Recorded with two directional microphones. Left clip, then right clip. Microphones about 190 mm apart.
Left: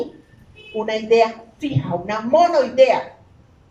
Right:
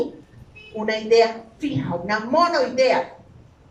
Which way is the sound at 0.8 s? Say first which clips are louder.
Left 1 dB; 15° left (ahead or behind).